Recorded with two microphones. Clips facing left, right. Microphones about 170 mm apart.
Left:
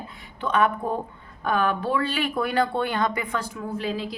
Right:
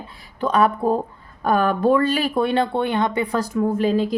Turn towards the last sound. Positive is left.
turn(degrees=-45)  # may be behind; listen again after turning